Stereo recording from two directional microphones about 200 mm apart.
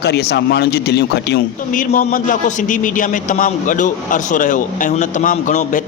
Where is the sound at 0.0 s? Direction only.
55° left (ahead or behind).